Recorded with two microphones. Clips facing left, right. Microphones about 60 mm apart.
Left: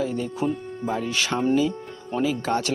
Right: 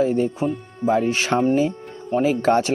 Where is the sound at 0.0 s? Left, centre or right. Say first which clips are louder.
Right 6 dB; right.